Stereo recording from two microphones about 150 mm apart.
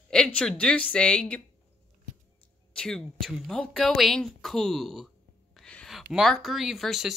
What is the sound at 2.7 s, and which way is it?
Speech, 5° left (ahead or behind).